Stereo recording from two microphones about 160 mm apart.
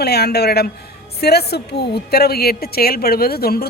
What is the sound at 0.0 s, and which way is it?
Speech, 90° left.